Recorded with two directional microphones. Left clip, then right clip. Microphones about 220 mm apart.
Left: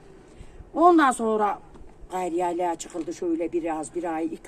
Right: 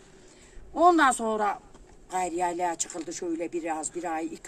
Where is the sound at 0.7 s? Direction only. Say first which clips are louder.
Left 2 dB; 15° right (ahead or behind).